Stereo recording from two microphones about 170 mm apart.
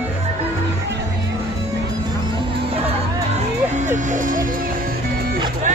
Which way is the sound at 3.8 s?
45° right (ahead or behind).